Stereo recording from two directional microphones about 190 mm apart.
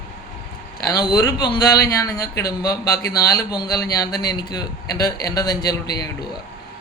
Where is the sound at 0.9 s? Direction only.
20° left (ahead or behind).